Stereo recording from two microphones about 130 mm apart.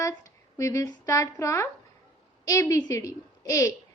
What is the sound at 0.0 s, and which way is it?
A woman's voice, 25° left (ahead or behind).